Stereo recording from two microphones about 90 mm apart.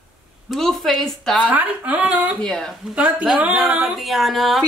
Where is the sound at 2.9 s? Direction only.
15° right (ahead or behind).